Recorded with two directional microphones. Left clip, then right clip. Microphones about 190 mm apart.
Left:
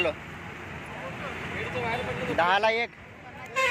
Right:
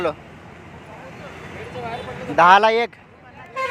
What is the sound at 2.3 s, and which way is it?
Speech, 55° right (ahead or behind).